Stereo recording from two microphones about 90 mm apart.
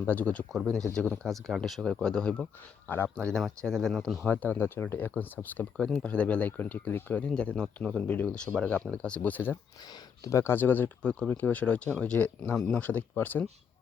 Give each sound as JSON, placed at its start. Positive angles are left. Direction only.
{"t": 0.0, "sound": "speech", "side_deg": 20}
{"t": 0.5, "sound": "speech", "side_deg": 0}
{"t": 2.9, "sound": "speech", "side_deg": 20}
{"t": 3.2, "sound": "speech", "side_deg": 10}
{"t": 4.3, "sound": "speech", "side_deg": 20}